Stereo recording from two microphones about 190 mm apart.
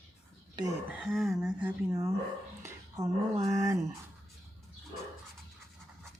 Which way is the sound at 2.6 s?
15° right (ahead or behind).